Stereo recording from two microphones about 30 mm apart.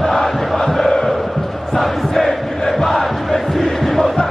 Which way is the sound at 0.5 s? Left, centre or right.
Centre.